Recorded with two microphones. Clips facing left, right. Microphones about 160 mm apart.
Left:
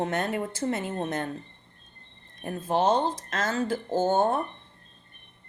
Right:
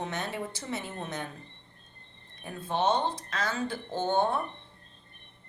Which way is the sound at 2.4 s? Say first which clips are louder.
Left 4 dB; 40° left (ahead or behind).